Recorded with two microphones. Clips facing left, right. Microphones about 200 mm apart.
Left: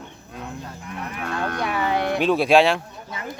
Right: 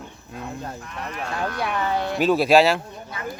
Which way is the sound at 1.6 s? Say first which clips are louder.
Left 1 dB; 10° left (ahead or behind).